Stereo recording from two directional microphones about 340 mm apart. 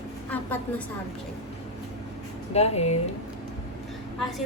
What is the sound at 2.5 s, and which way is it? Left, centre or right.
Speech, centre.